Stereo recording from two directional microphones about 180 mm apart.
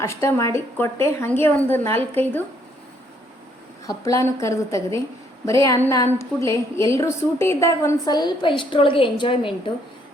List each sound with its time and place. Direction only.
0.0 s a woman's voice: 15° left (ahead or behind)
3.8 s a woman's voice: 20° left (ahead or behind)